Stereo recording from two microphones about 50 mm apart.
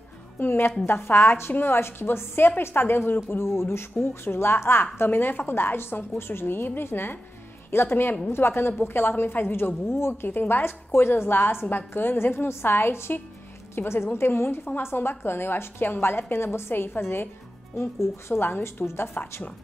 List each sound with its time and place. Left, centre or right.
0.4 s a woman's voice: left
17.7 s speech: left
18.3 s a woman's voice: left